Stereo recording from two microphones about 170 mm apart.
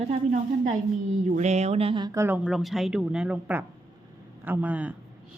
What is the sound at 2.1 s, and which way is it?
A woman's voice, 10° right (ahead or behind).